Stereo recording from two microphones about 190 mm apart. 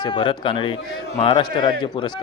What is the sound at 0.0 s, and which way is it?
Speech, 25° left (ahead or behind).